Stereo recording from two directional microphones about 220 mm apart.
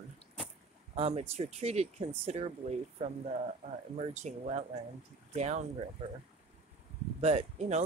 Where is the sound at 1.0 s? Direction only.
30° right (ahead or behind).